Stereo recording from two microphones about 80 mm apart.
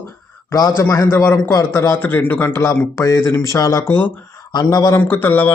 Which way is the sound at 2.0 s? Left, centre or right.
Left.